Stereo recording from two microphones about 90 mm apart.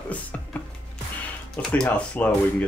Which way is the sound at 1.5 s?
15° left (ahead or behind).